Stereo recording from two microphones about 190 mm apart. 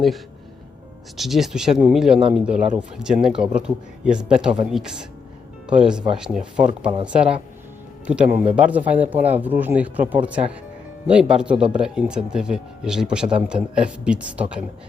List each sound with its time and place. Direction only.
1.1 s speech: centre (ahead or behind)